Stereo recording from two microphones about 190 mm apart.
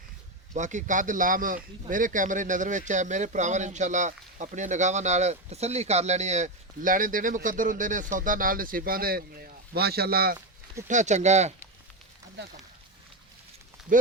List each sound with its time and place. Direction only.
0.5 s a man's voice: 40° right (ahead or behind)
10.8 s speech: 40° right (ahead or behind)
13.9 s a man's voice: 45° right (ahead or behind)